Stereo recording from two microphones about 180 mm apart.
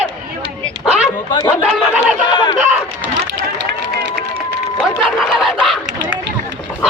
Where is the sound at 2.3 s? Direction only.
25° left (ahead or behind).